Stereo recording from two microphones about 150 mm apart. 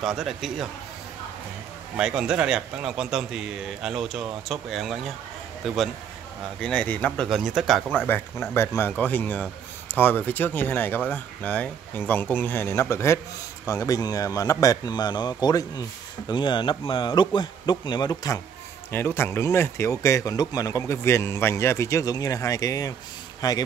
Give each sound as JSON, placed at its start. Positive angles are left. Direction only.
{"t": 0.0, "sound": "a man's voice", "side_deg": 0}
{"t": 2.0, "sound": "a man's voice", "side_deg": -5}
{"t": 6.6, "sound": "a man's voice", "side_deg": 5}
{"t": 7.9, "sound": "a man's voice", "side_deg": 10}
{"t": 18.9, "sound": "speech", "side_deg": 15}